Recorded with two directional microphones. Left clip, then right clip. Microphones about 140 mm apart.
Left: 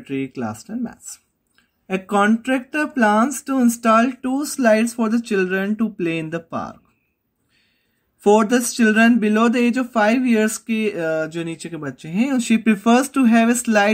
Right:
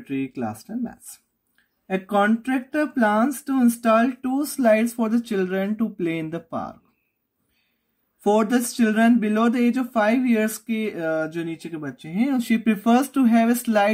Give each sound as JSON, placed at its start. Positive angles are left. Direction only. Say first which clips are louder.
{"t": 0.0, "sound": "speech", "louder": "left 2 dB", "side_deg": 25}
{"t": 8.2, "sound": "speech", "louder": "left 5 dB", "side_deg": 25}